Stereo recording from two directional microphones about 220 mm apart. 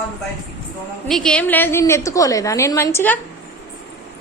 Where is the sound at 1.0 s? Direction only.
5° left (ahead or behind).